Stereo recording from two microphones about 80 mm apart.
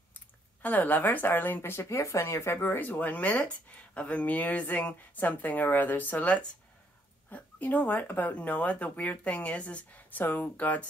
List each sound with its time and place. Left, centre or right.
0.1 s speech: left